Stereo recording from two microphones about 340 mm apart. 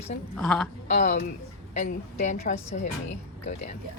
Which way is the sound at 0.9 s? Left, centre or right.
Left.